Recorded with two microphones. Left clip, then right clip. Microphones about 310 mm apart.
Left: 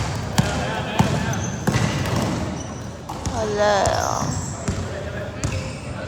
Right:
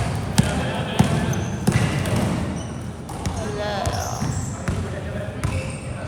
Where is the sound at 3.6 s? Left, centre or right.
Left.